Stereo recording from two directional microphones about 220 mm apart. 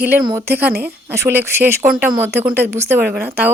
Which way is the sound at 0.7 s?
45° right (ahead or behind).